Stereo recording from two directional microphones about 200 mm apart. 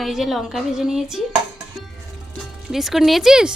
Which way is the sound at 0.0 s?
Centre (ahead or behind).